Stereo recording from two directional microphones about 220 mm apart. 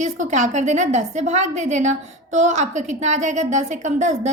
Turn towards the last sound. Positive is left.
turn(degrees=-30)  # may be behind; listen again after turning